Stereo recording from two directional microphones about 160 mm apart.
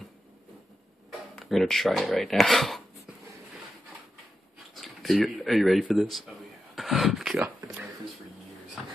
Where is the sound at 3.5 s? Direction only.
Centre (ahead or behind).